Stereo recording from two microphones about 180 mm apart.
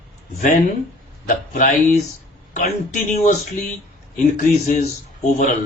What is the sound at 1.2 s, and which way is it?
Speech, 50° left (ahead or behind).